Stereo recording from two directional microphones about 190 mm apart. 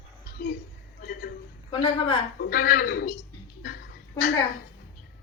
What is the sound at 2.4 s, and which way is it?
Speech, 50° left (ahead or behind).